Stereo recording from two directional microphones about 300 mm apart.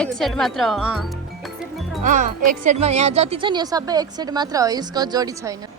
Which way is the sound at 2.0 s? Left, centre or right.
Right.